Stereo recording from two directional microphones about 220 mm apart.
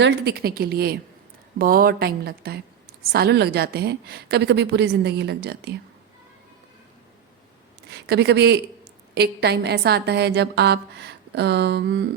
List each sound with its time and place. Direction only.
0.0 s a woman's voice: 50° right (ahead or behind)
7.9 s a woman's voice: 50° right (ahead or behind)